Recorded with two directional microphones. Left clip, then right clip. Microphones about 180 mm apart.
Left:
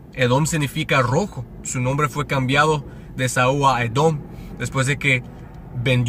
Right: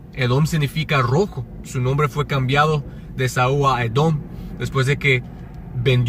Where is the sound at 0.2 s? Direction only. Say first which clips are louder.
Left 3 dB; 30° left (ahead or behind).